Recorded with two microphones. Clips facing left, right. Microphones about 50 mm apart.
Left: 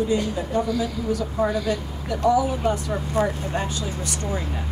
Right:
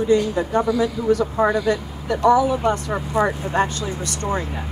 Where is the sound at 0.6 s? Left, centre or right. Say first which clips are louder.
Right 5 dB; centre.